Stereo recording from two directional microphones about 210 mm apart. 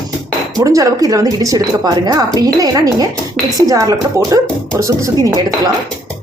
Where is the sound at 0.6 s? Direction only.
15° right (ahead or behind).